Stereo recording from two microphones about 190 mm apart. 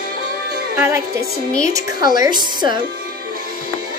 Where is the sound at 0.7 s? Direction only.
15° right (ahead or behind).